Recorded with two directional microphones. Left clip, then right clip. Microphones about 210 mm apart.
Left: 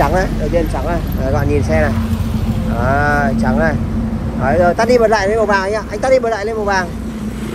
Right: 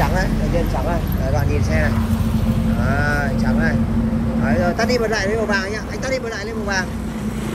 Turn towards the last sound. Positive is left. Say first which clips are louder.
# left 7 dB
turn(degrees=15)  # may be behind; listen again after turning